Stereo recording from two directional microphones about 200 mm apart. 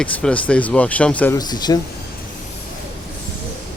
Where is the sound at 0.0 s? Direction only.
5° left (ahead or behind).